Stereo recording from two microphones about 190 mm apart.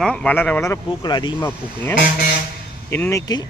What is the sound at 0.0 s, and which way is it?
Speech, 5° left (ahead or behind).